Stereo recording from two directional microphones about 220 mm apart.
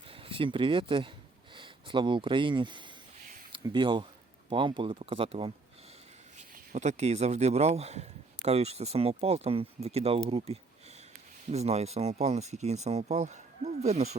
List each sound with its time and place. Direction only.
0.1 s speech: 25° right (ahead or behind)